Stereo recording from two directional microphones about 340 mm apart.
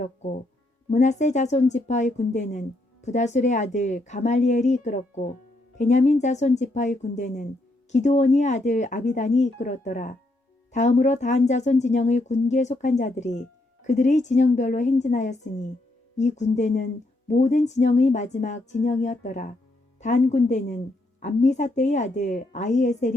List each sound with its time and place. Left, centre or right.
0.0 s speech: centre